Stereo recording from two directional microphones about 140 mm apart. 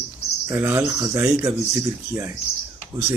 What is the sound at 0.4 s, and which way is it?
Speech, 15° right (ahead or behind).